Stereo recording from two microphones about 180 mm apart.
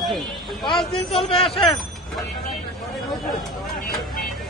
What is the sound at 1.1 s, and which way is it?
Speech, 30° left (ahead or behind).